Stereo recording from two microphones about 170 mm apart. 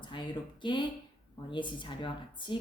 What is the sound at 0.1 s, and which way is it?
A woman's voice, 30° left (ahead or behind).